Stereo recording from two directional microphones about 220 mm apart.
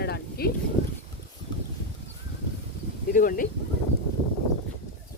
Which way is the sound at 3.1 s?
40° left (ahead or behind).